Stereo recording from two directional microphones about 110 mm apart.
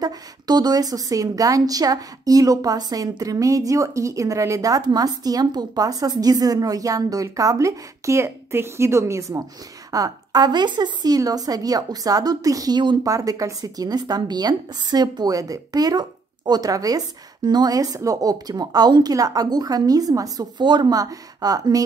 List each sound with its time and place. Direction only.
0.0 s a woman's voice: 40° right (ahead or behind)